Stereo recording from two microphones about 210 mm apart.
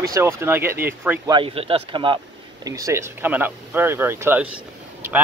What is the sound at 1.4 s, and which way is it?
Speech, 25° right (ahead or behind).